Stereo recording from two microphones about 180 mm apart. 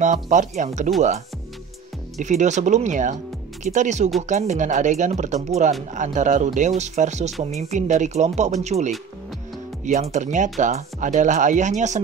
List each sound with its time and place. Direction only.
0.0 s speech: 45° right (ahead or behind)
2.1 s speech: 40° right (ahead or behind)